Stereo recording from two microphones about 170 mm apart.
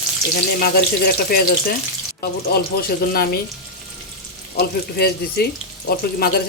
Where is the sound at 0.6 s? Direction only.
60° left (ahead or behind).